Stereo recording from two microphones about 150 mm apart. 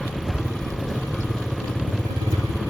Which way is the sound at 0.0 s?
Centre (ahead or behind).